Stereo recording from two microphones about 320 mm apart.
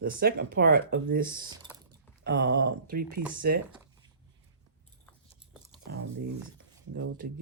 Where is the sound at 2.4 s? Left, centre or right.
Right.